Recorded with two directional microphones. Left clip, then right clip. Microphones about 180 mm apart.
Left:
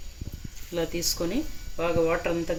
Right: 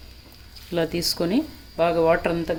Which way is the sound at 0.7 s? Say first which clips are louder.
Right 5 dB; 45° right (ahead or behind).